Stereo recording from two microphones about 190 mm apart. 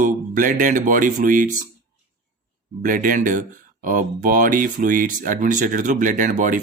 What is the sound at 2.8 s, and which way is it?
Speech, 45° right (ahead or behind).